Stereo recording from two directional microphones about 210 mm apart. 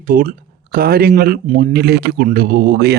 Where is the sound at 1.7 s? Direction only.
50° right (ahead or behind).